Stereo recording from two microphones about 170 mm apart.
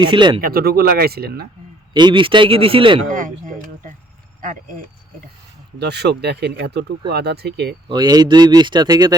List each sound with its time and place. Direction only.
0.0 s speech: 30° right (ahead or behind)
0.4 s speech: 60° right (ahead or behind)
1.9 s speech: 25° right (ahead or behind)
3.1 s a sound: 50° right (ahead or behind)
5.8 s speech: 75° right (ahead or behind)
7.9 s speech: 25° right (ahead or behind)